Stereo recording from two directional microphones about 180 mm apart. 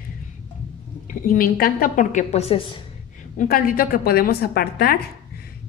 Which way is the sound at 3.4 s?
50° left (ahead or behind).